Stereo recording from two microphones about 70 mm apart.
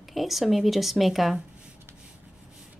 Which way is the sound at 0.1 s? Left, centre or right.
Centre.